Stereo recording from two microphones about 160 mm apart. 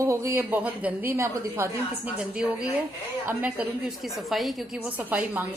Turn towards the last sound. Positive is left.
turn(degrees=-10)  # may be behind; listen again after turning